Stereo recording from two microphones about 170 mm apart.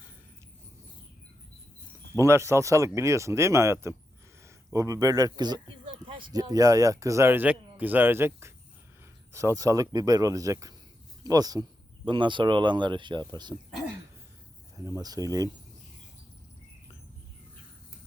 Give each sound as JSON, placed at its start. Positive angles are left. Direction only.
{"t": 2.1, "sound": "speech", "side_deg": -15}
{"t": 14.8, "sound": "speech", "side_deg": -20}